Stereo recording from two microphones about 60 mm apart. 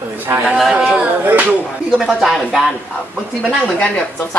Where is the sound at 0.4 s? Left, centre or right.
Centre.